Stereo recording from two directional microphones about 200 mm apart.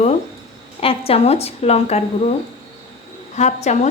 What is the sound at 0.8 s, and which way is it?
A woman's voice, 30° left (ahead or behind).